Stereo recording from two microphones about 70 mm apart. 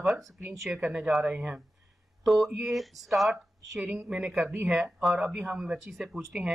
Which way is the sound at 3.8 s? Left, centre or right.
Right.